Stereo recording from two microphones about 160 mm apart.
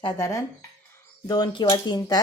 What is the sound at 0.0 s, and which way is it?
Speech, 20° left (ahead or behind).